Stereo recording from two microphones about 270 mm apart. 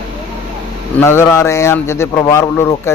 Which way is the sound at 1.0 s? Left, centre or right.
Centre.